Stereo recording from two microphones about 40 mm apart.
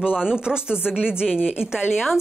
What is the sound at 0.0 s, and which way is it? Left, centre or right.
Speech, centre.